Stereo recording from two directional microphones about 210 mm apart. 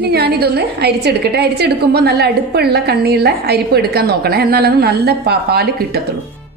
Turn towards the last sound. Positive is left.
turn(degrees=-50)  # may be behind; listen again after turning